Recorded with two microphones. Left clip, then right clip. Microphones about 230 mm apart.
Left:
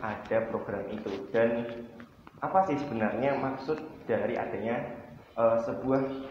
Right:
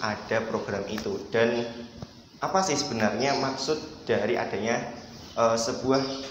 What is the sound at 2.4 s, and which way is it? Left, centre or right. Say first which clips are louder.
Speech: right 1 dB; right.